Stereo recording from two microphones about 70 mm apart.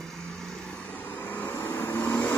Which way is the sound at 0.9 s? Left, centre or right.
Left.